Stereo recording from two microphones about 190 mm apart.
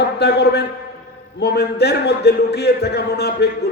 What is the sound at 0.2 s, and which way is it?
Mantra, 60° left (ahead or behind).